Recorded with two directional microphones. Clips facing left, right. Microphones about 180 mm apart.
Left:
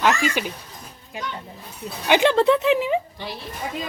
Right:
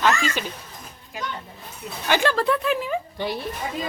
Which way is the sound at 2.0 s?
20° left (ahead or behind).